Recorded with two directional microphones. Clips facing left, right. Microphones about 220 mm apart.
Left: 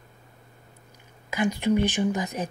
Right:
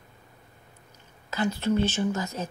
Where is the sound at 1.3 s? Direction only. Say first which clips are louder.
Left 2 dB; 15° left (ahead or behind).